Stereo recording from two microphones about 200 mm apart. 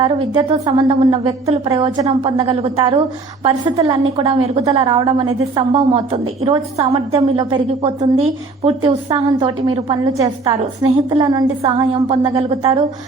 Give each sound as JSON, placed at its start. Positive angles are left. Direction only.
{"t": 0.0, "sound": "a woman's voice", "side_deg": -20}